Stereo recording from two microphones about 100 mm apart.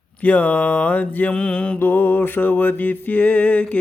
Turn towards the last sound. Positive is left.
turn(degrees=15)  # may be behind; listen again after turning